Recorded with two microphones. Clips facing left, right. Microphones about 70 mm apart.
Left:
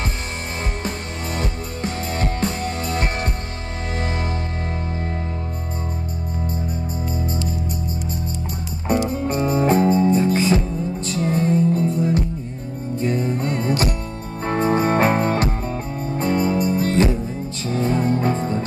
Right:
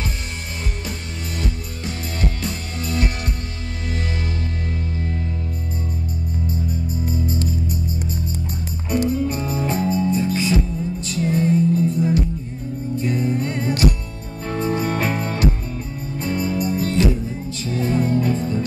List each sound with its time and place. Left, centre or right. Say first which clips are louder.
0.8 s music: left 4 dB; left
4.9 s music: even; left
9.1 s music: left 2 dB; left